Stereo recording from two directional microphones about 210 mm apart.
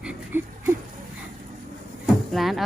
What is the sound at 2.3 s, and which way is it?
Music, centre (ahead or behind).